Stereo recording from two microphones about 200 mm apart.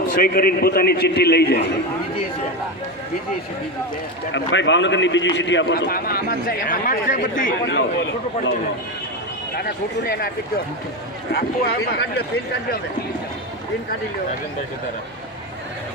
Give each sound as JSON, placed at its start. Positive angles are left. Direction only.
{"t": 0.1, "sound": "a man's voice", "side_deg": 45}
{"t": 4.3, "sound": "a man's voice", "side_deg": 65}
{"t": 7.7, "sound": "a man's voice", "side_deg": 60}
{"t": 11.3, "sound": "a man's voice", "side_deg": 50}